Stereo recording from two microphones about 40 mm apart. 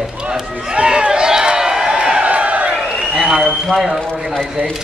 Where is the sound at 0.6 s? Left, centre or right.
Right.